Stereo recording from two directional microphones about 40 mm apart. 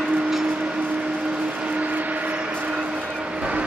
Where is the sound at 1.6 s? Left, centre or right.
Right.